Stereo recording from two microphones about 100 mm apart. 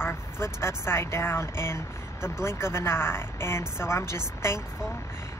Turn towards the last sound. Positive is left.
turn(degrees=25)  # may be behind; listen again after turning